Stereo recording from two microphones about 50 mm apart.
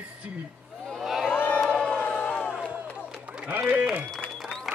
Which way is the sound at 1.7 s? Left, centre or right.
Left.